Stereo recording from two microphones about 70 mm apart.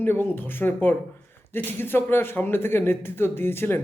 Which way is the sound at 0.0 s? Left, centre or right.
Left.